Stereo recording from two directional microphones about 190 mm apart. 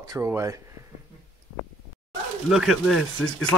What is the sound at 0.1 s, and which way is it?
Speech, 15° right (ahead or behind).